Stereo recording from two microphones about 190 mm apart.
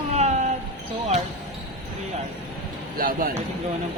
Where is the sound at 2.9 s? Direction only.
50° right (ahead or behind).